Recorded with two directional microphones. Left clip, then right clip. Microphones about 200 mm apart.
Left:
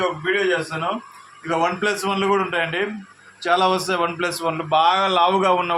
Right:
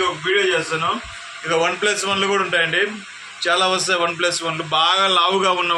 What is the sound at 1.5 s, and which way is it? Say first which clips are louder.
A man's voice: right 2 dB; 60° left (ahead or behind).